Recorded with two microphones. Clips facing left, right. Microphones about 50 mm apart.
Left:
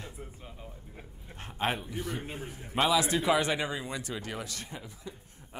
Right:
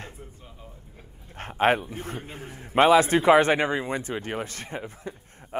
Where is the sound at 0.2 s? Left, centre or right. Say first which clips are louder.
Even; centre.